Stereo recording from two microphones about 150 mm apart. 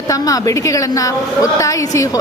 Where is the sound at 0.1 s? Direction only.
25° left (ahead or behind).